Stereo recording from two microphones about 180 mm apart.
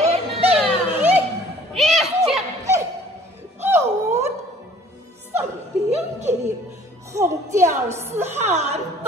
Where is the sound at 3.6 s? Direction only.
10° right (ahead or behind).